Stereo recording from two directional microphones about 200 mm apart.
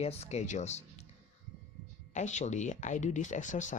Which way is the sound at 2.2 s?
35° left (ahead or behind).